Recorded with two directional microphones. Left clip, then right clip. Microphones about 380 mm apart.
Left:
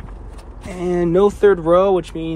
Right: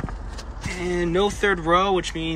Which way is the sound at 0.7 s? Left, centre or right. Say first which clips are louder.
Left 7 dB; centre.